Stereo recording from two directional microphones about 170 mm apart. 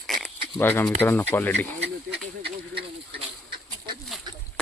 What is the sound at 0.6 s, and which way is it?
Speech, 15° left (ahead or behind).